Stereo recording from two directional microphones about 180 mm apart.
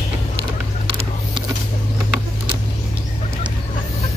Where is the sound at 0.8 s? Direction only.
25° right (ahead or behind).